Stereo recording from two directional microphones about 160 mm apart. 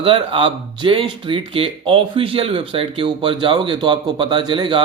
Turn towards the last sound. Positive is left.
turn(degrees=-30)  # may be behind; listen again after turning